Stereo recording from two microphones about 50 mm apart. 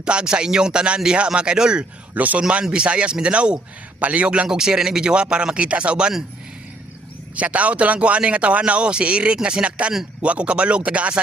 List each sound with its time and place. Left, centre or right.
0.0 s speech: centre
2.1 s speech: right
2.6 s speech: centre
4.4 s speech: centre
7.3 s speech: right